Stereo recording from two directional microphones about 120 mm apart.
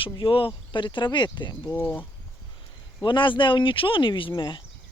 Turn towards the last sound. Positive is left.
turn(degrees=40)  # may be behind; listen again after turning